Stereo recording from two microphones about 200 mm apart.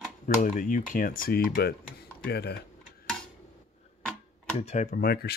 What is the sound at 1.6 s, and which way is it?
Speech, 55° left (ahead or behind).